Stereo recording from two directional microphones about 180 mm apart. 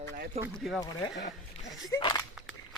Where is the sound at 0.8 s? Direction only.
20° left (ahead or behind).